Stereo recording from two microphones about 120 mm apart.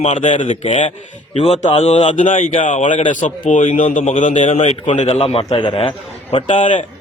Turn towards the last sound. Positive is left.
turn(degrees=90)